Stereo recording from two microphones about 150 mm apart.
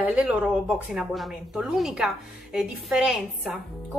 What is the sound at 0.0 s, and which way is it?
A woman's voice, 10° right (ahead or behind).